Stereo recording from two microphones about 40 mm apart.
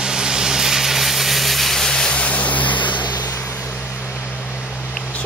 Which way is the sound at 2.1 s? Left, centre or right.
Left.